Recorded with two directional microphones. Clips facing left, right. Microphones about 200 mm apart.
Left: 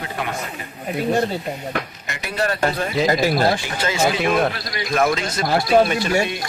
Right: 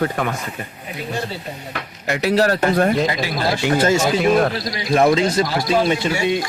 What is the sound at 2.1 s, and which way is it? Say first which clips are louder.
Speech: right 9 dB; 70° right (ahead or behind).